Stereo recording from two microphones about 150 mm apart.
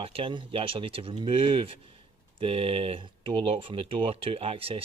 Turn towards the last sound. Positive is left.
turn(degrees=-40)  # may be behind; listen again after turning